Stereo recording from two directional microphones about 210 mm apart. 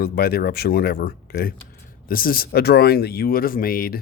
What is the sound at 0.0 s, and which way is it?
Speech, 45° left (ahead or behind).